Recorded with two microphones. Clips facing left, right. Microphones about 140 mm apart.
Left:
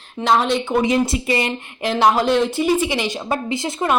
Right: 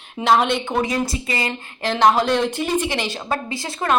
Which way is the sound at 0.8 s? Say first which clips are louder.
Left 5 dB; 25° left (ahead or behind).